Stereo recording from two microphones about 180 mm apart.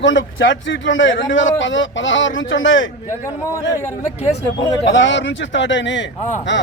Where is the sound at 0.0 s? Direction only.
90° left.